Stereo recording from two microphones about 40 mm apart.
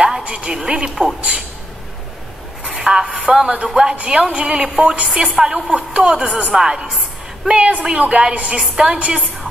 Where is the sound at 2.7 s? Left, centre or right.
Right.